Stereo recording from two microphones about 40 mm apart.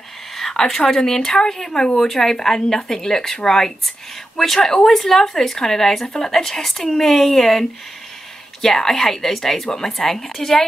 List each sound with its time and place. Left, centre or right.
0.4 s speech: centre
4.6 s a woman's voice: left
4.8 s speech: centre